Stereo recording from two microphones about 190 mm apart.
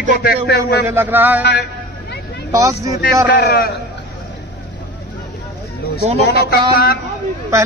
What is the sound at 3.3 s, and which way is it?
Speech, 55° left (ahead or behind).